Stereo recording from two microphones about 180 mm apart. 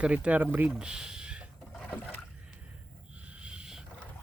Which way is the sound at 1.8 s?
10° left (ahead or behind).